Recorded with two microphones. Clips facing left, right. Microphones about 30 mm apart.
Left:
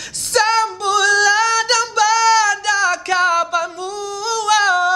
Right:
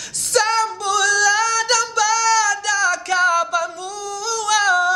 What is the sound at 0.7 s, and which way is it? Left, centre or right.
Singing, left.